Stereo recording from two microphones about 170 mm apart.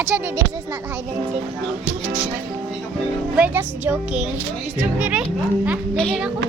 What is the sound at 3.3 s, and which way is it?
Speech, 10° right (ahead or behind).